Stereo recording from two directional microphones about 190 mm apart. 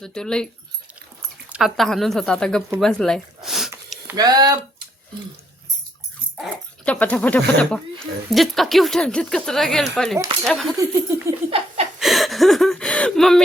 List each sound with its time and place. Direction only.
0.0 s speech: 5° left (ahead or behind)
1.5 s speech: 5° right (ahead or behind)
4.0 s speech: 20° right (ahead or behind)
6.8 s speech: 5° left (ahead or behind)
10.8 s a sound: 15° right (ahead or behind)
11.9 s gasp: centre (ahead or behind)